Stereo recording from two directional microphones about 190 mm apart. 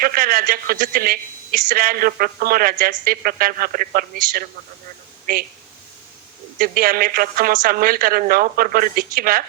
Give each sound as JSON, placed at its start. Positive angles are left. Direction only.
{"t": 0.0, "sound": "a man's voice", "side_deg": -50}
{"t": 6.6, "sound": "a man's voice", "side_deg": -50}